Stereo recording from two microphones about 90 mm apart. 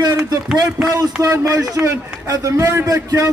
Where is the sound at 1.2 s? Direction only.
35° right (ahead or behind).